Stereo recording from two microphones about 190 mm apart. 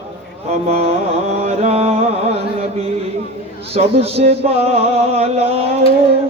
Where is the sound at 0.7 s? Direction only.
35° right (ahead or behind).